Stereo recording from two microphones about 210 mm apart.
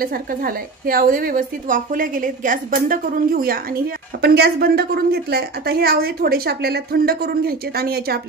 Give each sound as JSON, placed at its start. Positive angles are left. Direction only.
{"t": 0.0, "sound": "a woman's voice", "side_deg": -45}